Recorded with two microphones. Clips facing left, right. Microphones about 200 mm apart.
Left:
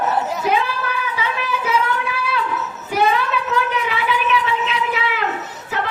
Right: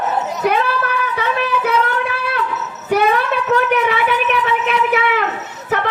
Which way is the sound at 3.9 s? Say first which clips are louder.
Right 3 dB; 55° right (ahead or behind).